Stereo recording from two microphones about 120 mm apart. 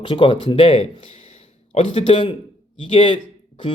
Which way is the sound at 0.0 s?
40° left (ahead or behind).